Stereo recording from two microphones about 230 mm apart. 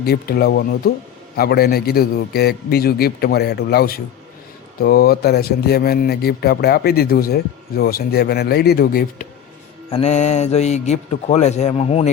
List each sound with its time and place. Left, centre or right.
0.0 s speech: left